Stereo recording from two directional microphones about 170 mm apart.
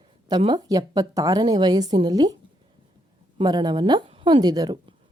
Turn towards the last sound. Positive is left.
turn(degrees=-25)  # may be behind; listen again after turning